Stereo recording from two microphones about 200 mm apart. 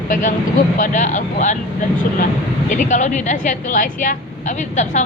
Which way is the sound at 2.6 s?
40° left (ahead or behind).